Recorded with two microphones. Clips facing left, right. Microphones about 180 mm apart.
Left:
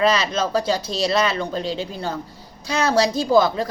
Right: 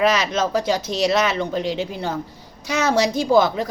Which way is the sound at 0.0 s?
15° right (ahead or behind).